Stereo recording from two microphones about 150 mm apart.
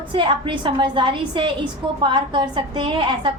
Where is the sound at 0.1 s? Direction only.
35° right (ahead or behind).